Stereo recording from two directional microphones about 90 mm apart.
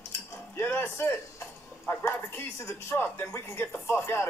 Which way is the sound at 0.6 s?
25° left (ahead or behind).